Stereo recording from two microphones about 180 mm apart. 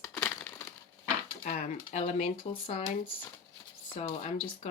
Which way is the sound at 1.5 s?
40° left (ahead or behind).